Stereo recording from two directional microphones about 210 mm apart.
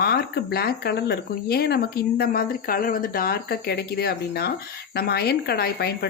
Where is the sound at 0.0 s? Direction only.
50° left (ahead or behind).